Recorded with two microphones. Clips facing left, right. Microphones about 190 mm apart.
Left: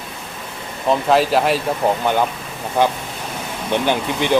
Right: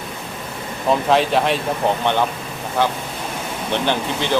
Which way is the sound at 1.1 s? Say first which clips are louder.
Left 2 dB; 5° left (ahead or behind).